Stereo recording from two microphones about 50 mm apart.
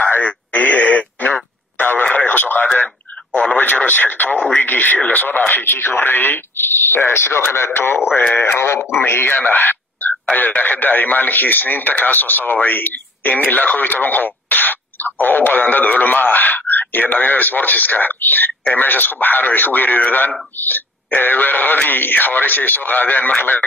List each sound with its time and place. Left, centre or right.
0.0 s radio: left
4.6 s speech: left
5.5 s speech: left
8.5 s speech: left
8.9 s speech: left
9.6 s a sound: left
10.3 s speech: left